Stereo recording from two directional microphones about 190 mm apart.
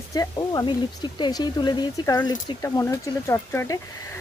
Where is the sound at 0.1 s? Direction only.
20° left (ahead or behind).